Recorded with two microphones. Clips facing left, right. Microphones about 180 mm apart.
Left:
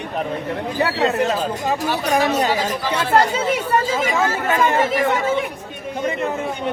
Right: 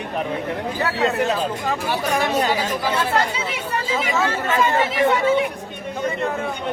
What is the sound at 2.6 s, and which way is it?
Speech, 45° left (ahead or behind).